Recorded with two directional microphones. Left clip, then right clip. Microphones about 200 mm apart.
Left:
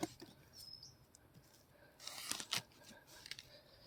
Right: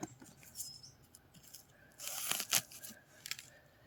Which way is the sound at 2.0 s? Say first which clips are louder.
Right 5 dB; 10° right (ahead or behind).